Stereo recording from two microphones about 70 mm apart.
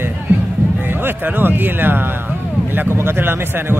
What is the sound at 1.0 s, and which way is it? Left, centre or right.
Speech, right.